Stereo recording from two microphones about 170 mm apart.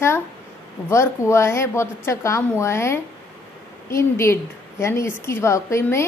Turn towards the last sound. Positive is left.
turn(degrees=15)  # may be behind; listen again after turning